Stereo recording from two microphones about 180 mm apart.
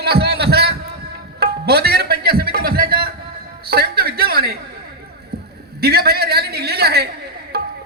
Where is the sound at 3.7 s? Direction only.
60° right (ahead or behind).